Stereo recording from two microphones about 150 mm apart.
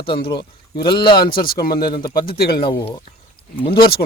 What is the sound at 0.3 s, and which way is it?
Speech, 30° left (ahead or behind).